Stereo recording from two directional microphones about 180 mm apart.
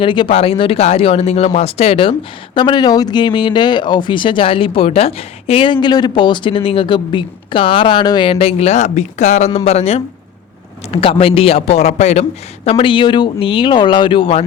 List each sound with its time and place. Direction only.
0.0 s speech: 25° left (ahead or behind)